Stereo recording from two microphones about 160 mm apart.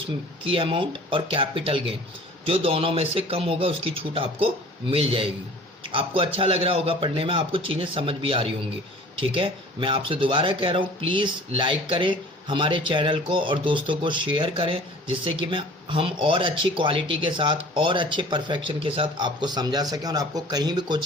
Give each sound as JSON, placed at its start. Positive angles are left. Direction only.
{"t": 0.4, "sound": "speech", "side_deg": -35}